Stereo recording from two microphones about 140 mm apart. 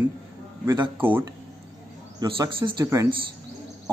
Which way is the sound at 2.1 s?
30° right (ahead or behind).